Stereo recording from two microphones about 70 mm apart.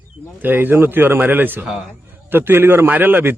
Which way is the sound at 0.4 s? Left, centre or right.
Right.